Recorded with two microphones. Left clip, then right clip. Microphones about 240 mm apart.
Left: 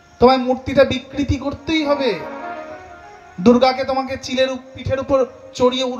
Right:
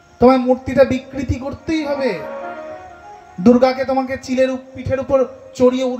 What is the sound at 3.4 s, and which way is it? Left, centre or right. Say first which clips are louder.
A man's voice: right 1 dB; left.